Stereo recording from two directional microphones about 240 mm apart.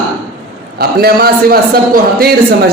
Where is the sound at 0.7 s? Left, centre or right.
Right.